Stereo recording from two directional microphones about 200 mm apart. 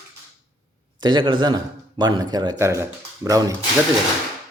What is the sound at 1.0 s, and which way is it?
A man's voice, 25° right (ahead or behind).